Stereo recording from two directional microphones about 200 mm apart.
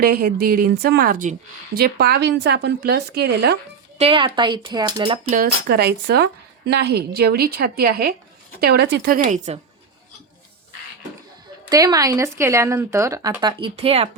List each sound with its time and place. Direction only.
0.0 s a woman's voice: 50° right (ahead or behind)
3.9 s speech: 30° right (ahead or behind)
5.3 s a woman's voice: 45° right (ahead or behind)
11.7 s speech: 20° right (ahead or behind)